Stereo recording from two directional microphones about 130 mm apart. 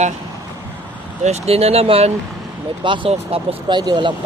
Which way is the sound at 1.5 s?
50° right (ahead or behind).